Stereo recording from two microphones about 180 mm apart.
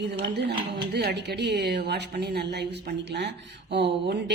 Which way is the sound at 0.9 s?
65° right (ahead or behind).